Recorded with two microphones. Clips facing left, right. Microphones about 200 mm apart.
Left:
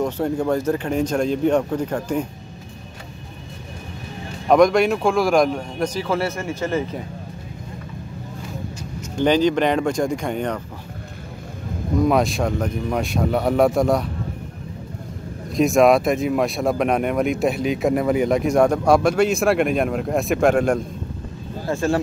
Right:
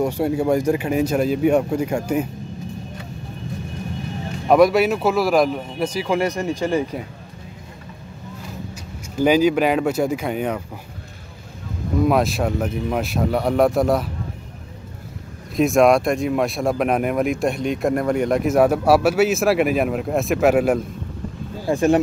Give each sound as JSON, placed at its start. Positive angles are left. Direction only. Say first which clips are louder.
{"t": 0.0, "sound": "speech", "louder": "right 2 dB", "side_deg": -10}
{"t": 4.5, "sound": "speech", "louder": "even", "side_deg": -5}
{"t": 9.1, "sound": "speech", "louder": "right 1 dB", "side_deg": -5}
{"t": 12.0, "sound": "speech", "louder": "even", "side_deg": 0}
{"t": 15.5, "sound": "speech", "louder": "even", "side_deg": 0}
{"t": 21.6, "sound": "speech", "louder": "right 4 dB", "side_deg": -20}